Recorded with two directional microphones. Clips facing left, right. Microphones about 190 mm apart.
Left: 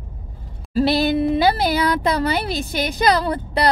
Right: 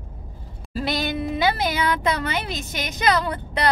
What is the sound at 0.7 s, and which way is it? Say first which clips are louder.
Speech: left 8 dB; 30° left (ahead or behind).